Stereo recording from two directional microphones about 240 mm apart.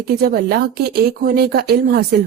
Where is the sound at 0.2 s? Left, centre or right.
Right.